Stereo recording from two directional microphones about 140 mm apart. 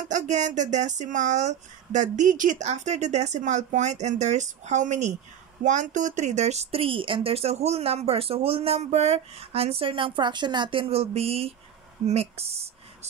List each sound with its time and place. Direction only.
0.0 s speech: 60° right (ahead or behind)